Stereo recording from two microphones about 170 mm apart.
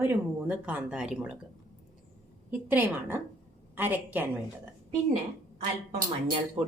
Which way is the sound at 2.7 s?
10° right (ahead or behind).